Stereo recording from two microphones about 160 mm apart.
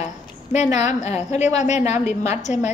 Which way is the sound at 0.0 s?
45° left (ahead or behind).